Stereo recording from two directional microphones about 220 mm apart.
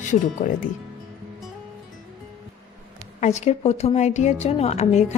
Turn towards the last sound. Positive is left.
turn(degrees=30)  # may be behind; listen again after turning